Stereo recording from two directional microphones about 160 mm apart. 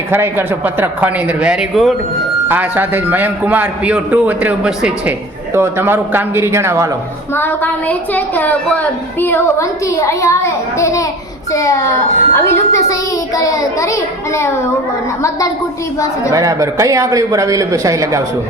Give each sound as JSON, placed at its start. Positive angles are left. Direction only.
{"t": 0.1, "sound": "a man's voice", "side_deg": -15}
{"t": 2.5, "sound": "a man's voice", "side_deg": -10}
{"t": 7.3, "sound": "a woman's voice", "side_deg": 10}
{"t": 16.3, "sound": "speech", "side_deg": -20}